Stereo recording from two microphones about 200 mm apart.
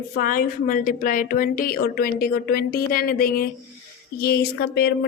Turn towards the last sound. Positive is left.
turn(degrees=55)  # may be behind; listen again after turning